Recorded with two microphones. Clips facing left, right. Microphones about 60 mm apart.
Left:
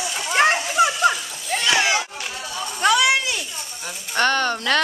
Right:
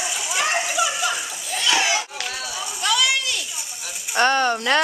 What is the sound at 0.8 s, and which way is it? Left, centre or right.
Dog, left.